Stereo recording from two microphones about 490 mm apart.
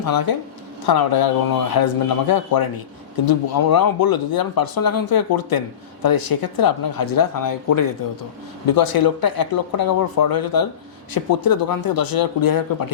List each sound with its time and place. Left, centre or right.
0.0 s speech: left